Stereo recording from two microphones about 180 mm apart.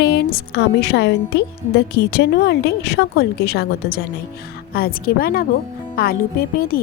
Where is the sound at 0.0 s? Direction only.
65° left (ahead or behind).